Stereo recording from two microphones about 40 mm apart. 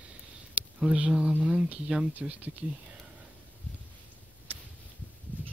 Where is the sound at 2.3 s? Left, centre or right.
Right.